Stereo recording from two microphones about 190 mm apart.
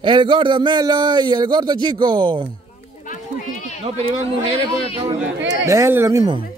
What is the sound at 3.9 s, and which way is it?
Speech, 30° right (ahead or behind).